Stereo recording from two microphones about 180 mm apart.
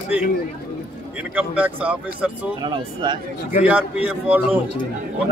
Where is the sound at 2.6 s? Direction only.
25° right (ahead or behind).